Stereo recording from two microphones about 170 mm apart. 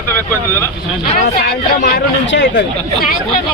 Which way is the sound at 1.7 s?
65° left (ahead or behind).